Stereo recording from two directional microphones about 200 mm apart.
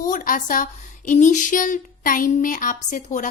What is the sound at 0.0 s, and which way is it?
A woman's voice, 40° left (ahead or behind).